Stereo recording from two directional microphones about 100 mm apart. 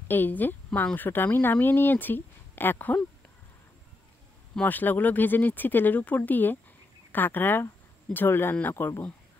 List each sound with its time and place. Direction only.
0.1 s speech: 20° left (ahead or behind)
4.6 s speech: 15° left (ahead or behind)